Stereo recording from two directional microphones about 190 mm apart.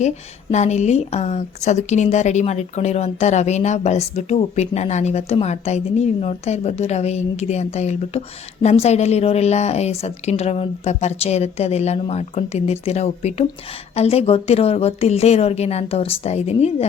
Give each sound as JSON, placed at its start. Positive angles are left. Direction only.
{"t": 0.5, "sound": "a woman's voice", "side_deg": 35}